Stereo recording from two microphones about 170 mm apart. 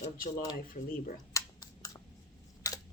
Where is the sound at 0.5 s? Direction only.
55° left (ahead or behind).